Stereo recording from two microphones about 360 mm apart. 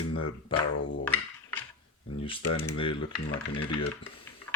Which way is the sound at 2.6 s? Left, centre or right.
Centre.